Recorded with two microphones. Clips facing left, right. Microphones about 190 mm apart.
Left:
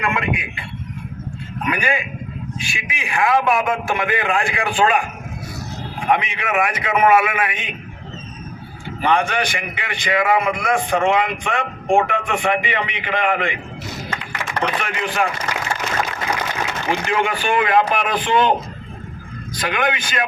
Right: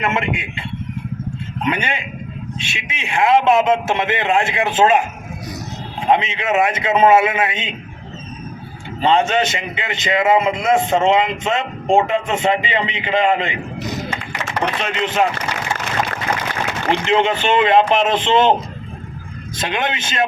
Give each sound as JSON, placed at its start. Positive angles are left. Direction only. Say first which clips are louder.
{"t": 0.0, "sound": "a man's voice", "louder": "right 1 dB", "side_deg": -25}
{"t": 1.6, "sound": "a man's voice", "louder": "even", "side_deg": -25}
{"t": 6.1, "sound": "a man's voice", "louder": "right 3 dB", "side_deg": -25}
{"t": 9.0, "sound": "a man's voice", "louder": "right 3 dB", "side_deg": -25}
{"t": 16.9, "sound": "a man's voice", "louder": "right 4 dB", "side_deg": -25}
{"t": 19.5, "sound": "a man's voice", "louder": "left 1 dB", "side_deg": -25}